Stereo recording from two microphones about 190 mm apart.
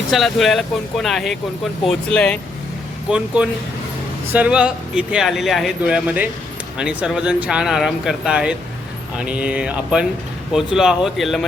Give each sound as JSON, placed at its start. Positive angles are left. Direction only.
{"t": 0.1, "sound": "speech", "side_deg": 0}
{"t": 3.1, "sound": "speech", "side_deg": -5}